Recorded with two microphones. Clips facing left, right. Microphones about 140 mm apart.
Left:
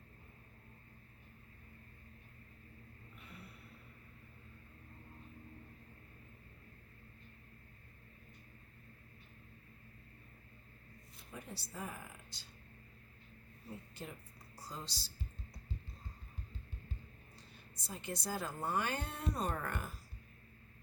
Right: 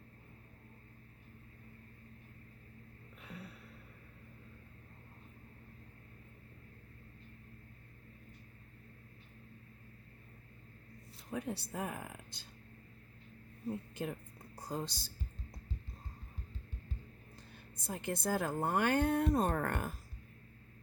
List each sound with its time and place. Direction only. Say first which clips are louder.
3.2 s a sound: right 6 dB; 90° right
11.3 s speech: right 10 dB; 70° right (ahead or behind)
13.7 s a woman's voice: right 9 dB; 55° right (ahead or behind)
17.7 s speech: right 5 dB; 55° right (ahead or behind)